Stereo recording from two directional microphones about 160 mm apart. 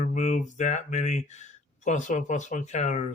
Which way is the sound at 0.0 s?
50° left (ahead or behind).